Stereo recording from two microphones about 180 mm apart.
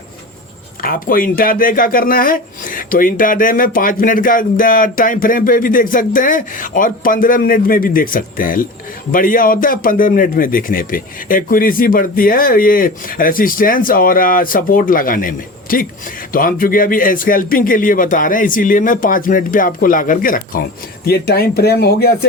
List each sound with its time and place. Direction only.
0.8 s speech: 50° left (ahead or behind)